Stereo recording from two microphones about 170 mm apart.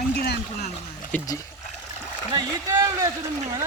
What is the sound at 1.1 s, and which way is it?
Speech, 10° left (ahead or behind).